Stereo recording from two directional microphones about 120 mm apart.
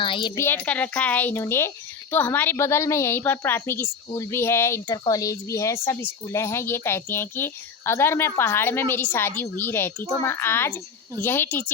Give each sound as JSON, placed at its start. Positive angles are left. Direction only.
{"t": 0.0, "sound": "a woman's voice", "side_deg": 45}
{"t": 0.3, "sound": "a woman's voice", "side_deg": 15}